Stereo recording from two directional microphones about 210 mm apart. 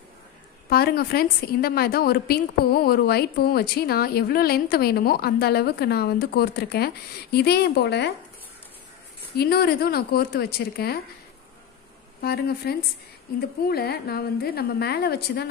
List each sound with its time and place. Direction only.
0.7 s a woman's voice: 50° left (ahead or behind)
9.3 s a woman's voice: 50° left (ahead or behind)
12.2 s a woman's voice: 50° left (ahead or behind)